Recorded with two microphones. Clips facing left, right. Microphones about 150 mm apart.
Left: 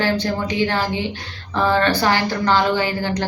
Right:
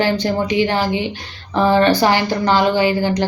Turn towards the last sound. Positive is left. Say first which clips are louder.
# right 5 dB
turn(degrees=-15)  # may be behind; listen again after turning